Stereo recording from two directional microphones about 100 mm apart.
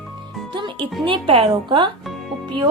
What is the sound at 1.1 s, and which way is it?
Speech, 65° right (ahead or behind).